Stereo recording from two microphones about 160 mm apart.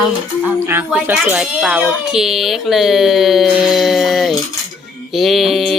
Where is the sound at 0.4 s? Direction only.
15° right (ahead or behind).